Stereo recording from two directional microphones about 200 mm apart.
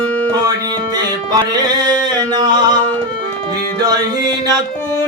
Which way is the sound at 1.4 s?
20° right (ahead or behind).